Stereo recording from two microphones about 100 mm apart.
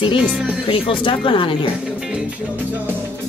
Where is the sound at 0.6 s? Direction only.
60° left (ahead or behind).